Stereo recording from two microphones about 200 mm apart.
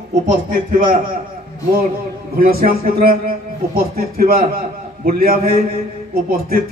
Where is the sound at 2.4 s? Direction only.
45° right (ahead or behind).